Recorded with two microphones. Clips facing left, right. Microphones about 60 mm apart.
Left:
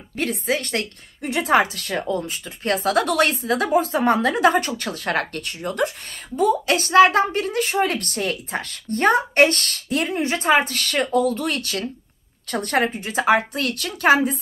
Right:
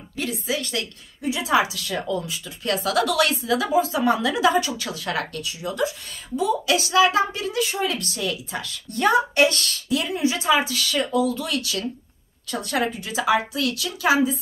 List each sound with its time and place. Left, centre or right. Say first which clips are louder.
0.2 s a woman's voice: left 3 dB; left